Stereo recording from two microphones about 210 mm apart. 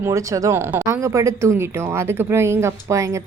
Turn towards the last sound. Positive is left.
turn(degrees=-15)  # may be behind; listen again after turning